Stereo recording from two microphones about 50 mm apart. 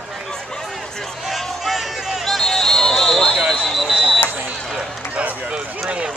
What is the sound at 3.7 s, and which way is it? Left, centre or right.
Vehicle, centre.